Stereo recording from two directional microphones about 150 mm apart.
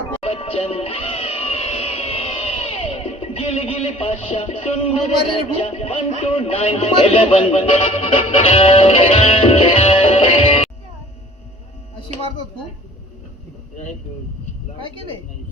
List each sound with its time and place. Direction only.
0.2 s speech: 40° left (ahead or behind)